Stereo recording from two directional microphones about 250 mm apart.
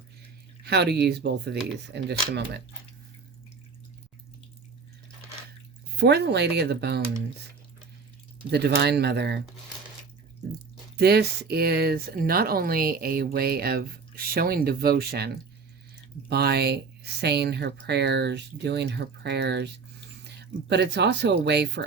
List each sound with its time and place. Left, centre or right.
0.6 s speech: right
6.0 s speech: right
8.4 s speech: right
10.9 s speech: right
16.3 s speech: right